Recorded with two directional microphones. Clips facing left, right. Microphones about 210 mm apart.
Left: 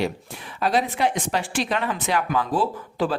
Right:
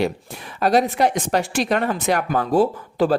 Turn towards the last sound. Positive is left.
turn(degrees=-40)  # may be behind; listen again after turning